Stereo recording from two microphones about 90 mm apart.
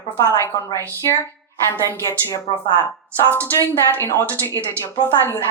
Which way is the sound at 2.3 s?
50° left (ahead or behind).